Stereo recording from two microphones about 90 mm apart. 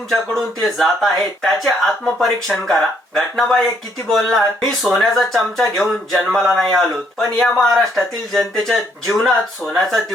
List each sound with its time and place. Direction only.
0.1 s speech: centre (ahead or behind)